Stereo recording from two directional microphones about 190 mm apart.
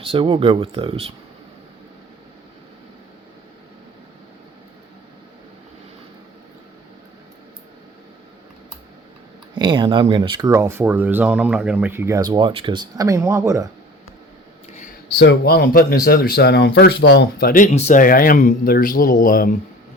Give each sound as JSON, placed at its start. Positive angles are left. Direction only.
{"t": 0.0, "sound": "speech", "side_deg": -30}
{"t": 9.6, "sound": "speech", "side_deg": -25}
{"t": 15.2, "sound": "speech", "side_deg": 60}